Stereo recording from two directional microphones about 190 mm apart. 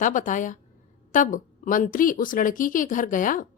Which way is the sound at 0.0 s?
45° left (ahead or behind).